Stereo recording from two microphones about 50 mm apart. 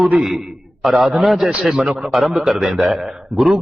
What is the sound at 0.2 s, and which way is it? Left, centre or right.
A man's voice, centre.